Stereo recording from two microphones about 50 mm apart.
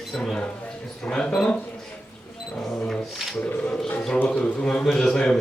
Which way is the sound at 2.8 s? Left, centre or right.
Centre.